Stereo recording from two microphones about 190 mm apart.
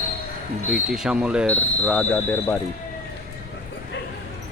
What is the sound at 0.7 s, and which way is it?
Speech, 5° right (ahead or behind).